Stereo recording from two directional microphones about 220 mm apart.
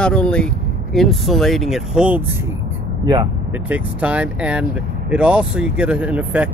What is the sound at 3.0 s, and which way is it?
Speech, 20° right (ahead or behind).